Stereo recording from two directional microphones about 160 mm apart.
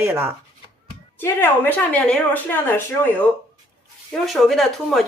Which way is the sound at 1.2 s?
10° left (ahead or behind).